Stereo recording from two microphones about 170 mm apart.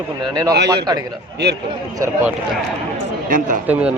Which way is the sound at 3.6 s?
10° right (ahead or behind).